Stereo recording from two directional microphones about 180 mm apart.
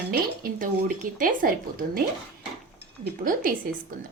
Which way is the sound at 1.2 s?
50° right (ahead or behind).